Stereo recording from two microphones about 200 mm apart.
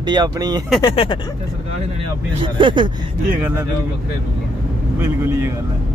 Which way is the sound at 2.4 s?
25° right (ahead or behind).